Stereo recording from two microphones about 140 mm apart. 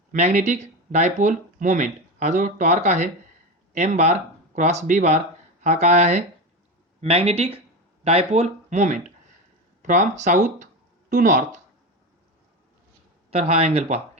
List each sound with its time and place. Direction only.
0.1 s speech: 55° right (ahead or behind)
13.3 s speech: 50° right (ahead or behind)